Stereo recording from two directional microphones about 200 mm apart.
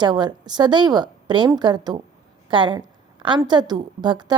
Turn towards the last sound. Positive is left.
turn(degrees=-20)  # may be behind; listen again after turning